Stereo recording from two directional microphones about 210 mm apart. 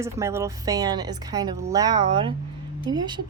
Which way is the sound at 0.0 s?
15° right (ahead or behind).